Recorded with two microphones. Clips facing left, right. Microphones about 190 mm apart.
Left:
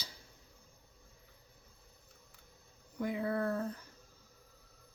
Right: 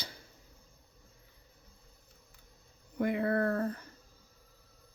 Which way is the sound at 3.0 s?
70° right (ahead or behind).